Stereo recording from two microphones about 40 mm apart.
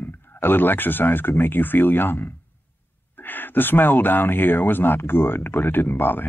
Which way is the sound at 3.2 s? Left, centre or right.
Left.